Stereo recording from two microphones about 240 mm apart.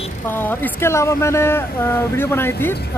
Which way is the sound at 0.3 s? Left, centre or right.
Centre.